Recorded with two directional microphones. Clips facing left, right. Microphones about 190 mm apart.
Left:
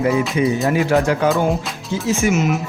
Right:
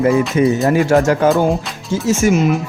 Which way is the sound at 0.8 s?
45° right (ahead or behind).